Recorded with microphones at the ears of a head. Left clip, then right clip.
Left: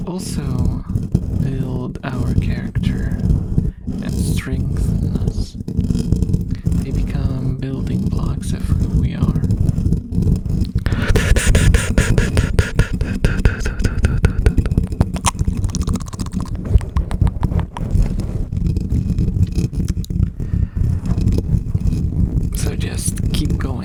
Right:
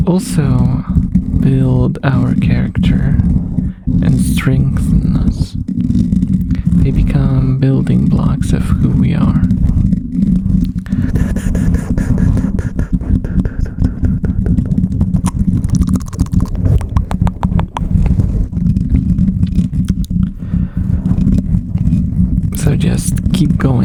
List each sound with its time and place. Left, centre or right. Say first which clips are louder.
0.0 s speech: right 10 dB; right
9.8 s stomach rumble: right 7 dB; right
15.4 s stomach rumble: right 8 dB; right
18.6 s vehicle: right 8 dB; right
21.1 s vehicle: right 6 dB; right